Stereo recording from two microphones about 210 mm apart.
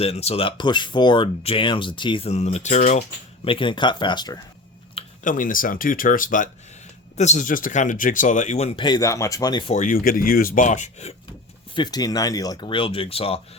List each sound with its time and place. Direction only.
0.0 s speech: 30° left (ahead or behind)
5.2 s speech: 40° left (ahead or behind); by 9.7 s 20° left (ahead or behind)
9.7 s speech: 40° left (ahead or behind)
11.7 s speech: 20° left (ahead or behind)